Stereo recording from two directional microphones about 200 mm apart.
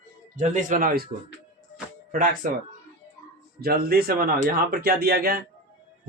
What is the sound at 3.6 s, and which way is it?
Speech, 50° right (ahead or behind).